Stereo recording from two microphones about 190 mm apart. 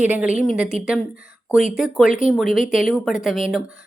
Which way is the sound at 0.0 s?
5° right (ahead or behind).